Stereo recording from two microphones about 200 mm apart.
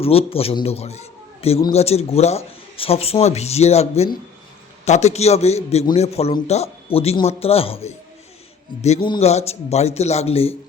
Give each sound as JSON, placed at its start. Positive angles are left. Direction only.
{"t": 0.0, "sound": "a man's voice", "side_deg": 30}